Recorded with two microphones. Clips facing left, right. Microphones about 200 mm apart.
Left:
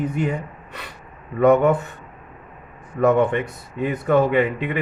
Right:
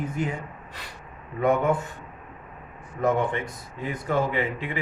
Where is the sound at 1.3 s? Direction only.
70° left (ahead or behind).